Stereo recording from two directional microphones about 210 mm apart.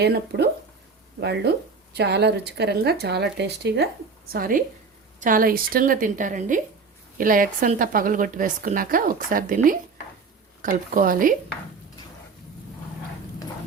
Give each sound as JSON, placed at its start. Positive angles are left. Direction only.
{"t": 0.0, "sound": "a woman's voice", "side_deg": -50}